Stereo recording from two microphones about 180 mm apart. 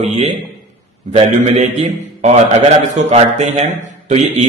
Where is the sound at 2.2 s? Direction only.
40° right (ahead or behind).